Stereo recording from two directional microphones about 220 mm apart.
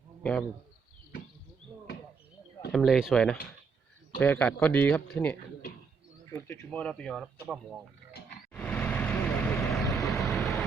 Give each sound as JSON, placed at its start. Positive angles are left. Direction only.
{"t": 0.2, "sound": "speech", "side_deg": 5}
{"t": 2.7, "sound": "speech", "side_deg": 0}
{"t": 8.1, "sound": "a sound", "side_deg": 45}
{"t": 8.5, "sound": "vehicle", "side_deg": 5}
{"t": 9.7, "sound": "vehicle", "side_deg": 0}